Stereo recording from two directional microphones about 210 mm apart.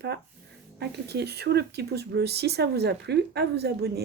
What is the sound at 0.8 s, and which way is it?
Speech, 50° right (ahead or behind).